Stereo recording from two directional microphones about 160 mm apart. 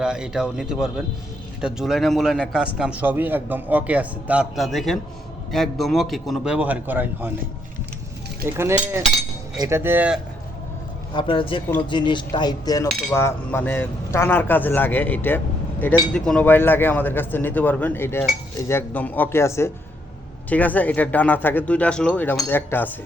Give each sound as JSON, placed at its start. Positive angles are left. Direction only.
{"t": 0.0, "sound": "a man's voice", "side_deg": -5}
{"t": 8.4, "sound": "speech", "side_deg": -15}
{"t": 11.1, "sound": "speech", "side_deg": 30}
{"t": 12.9, "sound": "a man's voice", "side_deg": 0}
{"t": 13.1, "sound": "speech", "side_deg": 15}